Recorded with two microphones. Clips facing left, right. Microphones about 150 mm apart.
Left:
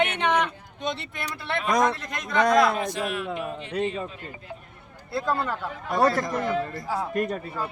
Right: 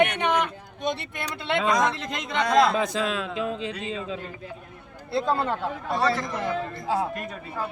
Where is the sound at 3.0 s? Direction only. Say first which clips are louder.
Right 2 dB; 90° right.